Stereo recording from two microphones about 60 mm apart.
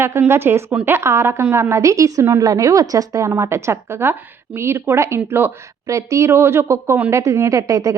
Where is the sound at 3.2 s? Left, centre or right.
Right.